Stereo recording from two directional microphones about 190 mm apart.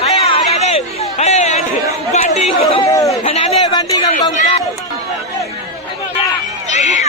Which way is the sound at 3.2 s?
35° left (ahead or behind).